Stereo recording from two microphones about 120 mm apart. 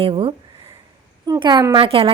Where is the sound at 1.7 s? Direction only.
50° right (ahead or behind).